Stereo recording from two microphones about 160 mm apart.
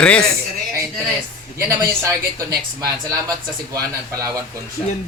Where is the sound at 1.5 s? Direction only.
20° right (ahead or behind).